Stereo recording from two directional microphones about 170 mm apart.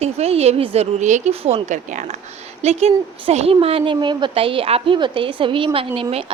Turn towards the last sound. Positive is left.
turn(degrees=-35)  # may be behind; listen again after turning